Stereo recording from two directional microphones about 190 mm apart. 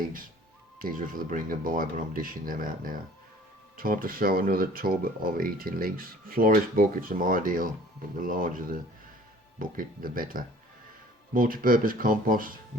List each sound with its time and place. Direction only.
0.8 s speech: 45° right (ahead or behind)